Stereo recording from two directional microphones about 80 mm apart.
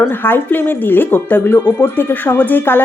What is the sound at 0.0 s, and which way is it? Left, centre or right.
Speech, left.